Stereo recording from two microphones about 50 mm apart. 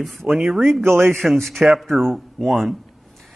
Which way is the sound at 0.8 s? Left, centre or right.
Right.